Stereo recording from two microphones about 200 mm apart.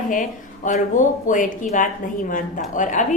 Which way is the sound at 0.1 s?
40° left (ahead or behind).